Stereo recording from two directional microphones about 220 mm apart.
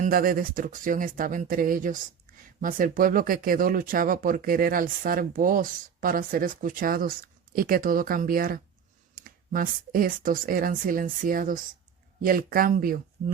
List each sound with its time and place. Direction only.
0.0 s speech: 40° right (ahead or behind)